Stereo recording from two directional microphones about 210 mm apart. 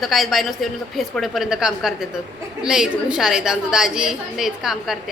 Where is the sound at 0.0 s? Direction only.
Centre (ahead or behind).